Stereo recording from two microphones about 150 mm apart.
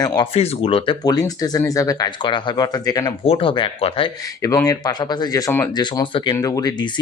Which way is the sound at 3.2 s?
35° left (ahead or behind).